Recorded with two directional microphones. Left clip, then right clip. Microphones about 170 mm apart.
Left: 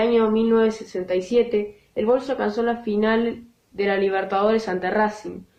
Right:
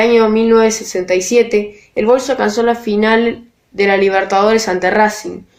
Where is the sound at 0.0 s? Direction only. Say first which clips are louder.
Right 8 dB; 40° right (ahead or behind).